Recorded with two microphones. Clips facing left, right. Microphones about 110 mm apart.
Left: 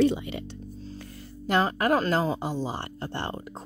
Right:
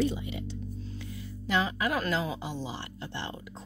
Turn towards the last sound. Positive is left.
turn(degrees=50)  # may be behind; listen again after turning